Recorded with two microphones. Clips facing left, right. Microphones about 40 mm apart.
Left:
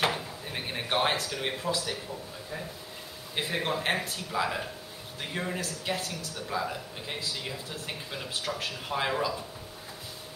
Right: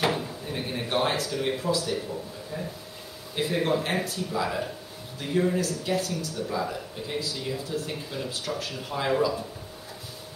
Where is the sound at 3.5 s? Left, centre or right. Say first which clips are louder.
Right 6 dB; centre.